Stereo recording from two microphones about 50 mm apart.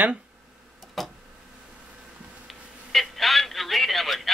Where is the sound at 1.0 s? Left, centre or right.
Centre.